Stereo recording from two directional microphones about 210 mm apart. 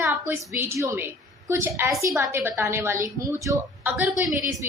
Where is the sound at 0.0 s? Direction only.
10° right (ahead or behind).